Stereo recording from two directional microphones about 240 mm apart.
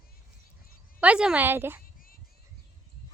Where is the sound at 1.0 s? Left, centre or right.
Centre.